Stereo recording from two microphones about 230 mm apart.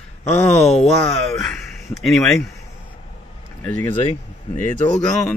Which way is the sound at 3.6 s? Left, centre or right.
Centre.